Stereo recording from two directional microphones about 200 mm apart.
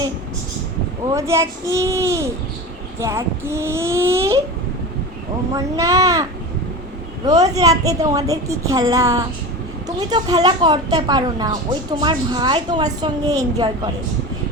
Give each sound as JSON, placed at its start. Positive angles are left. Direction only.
{"t": 1.1, "sound": "a woman's voice", "side_deg": -15}
{"t": 5.5, "sound": "a woman's voice", "side_deg": -15}
{"t": 7.3, "sound": "a woman's voice", "side_deg": -15}